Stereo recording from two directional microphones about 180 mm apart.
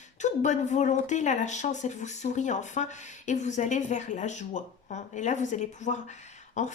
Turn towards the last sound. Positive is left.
turn(degrees=40)  # may be behind; listen again after turning